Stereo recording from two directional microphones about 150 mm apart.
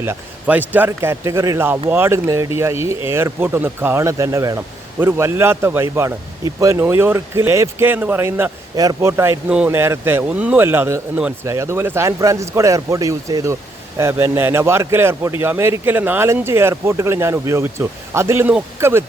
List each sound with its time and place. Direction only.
0.0 s speech: 15° right (ahead or behind)
8.7 s speech: 25° right (ahead or behind)